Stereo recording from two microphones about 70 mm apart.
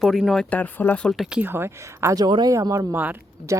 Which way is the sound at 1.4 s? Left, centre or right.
Right.